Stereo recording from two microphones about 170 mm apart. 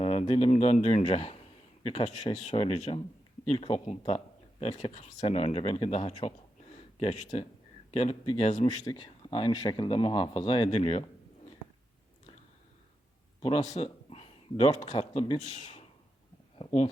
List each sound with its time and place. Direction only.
0.0 s speech: 35° left (ahead or behind)
8.8 s speech: 25° left (ahead or behind)
13.4 s speech: 40° left (ahead or behind)